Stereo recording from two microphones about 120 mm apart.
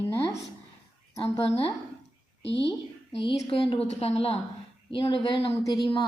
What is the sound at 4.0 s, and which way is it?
Speech, 60° left (ahead or behind).